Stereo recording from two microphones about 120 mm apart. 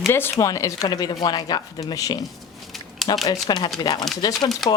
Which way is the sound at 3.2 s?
35° left (ahead or behind).